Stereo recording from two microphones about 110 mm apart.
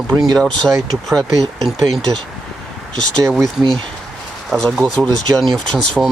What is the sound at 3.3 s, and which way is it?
Speech, 5° right (ahead or behind).